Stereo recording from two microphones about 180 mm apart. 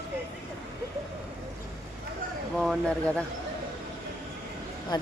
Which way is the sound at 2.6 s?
Centre (ahead or behind).